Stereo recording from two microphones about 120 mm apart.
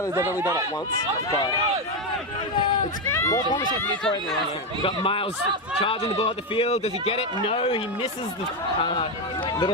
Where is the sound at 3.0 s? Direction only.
20° left (ahead or behind).